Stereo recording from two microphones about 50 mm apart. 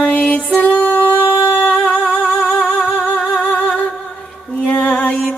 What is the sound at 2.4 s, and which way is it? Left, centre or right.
Music, centre.